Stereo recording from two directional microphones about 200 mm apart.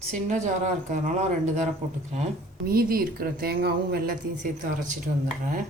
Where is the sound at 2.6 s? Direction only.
50° right (ahead or behind).